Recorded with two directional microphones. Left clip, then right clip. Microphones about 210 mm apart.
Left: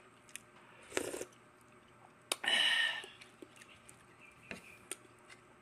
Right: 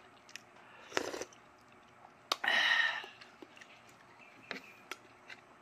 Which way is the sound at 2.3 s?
20° left (ahead or behind).